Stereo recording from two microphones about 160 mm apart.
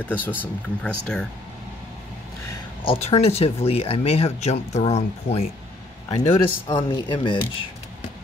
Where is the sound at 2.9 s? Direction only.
40° left (ahead or behind).